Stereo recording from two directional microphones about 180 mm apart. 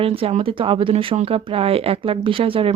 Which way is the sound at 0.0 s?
30° right (ahead or behind).